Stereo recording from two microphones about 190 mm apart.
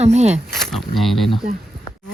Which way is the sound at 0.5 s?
Centre (ahead or behind).